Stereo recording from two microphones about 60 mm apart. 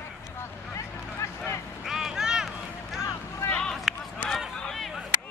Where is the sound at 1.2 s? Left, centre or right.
Left.